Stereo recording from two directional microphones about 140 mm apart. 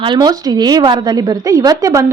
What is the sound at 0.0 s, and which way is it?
A woman's voice, 30° right (ahead or behind).